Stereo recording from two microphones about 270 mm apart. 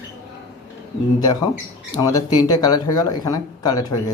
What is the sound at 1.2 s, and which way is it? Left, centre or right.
Speech, centre.